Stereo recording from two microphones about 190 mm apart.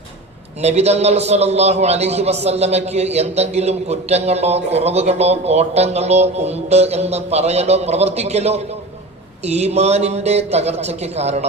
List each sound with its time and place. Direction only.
0.6 s a man's voice: 35° right (ahead or behind)